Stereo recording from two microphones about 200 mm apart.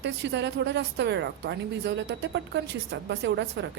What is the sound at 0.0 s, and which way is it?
A woman's voice, 60° right (ahead or behind).